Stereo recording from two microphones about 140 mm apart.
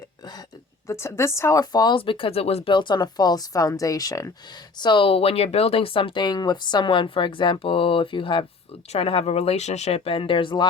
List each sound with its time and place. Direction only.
0.9 s speech: 20° left (ahead or behind)
4.8 s speech: 35° left (ahead or behind)